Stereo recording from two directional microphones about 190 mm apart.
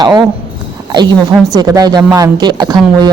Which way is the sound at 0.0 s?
20° right (ahead or behind).